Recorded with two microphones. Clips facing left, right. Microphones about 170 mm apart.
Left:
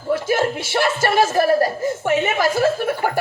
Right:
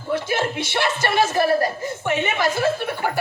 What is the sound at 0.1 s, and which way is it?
A woman's voice, 45° left (ahead or behind).